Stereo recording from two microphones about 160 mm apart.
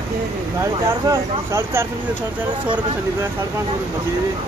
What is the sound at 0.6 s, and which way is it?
Speech, 15° right (ahead or behind).